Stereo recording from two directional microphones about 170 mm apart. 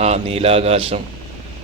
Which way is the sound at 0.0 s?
35° right (ahead or behind).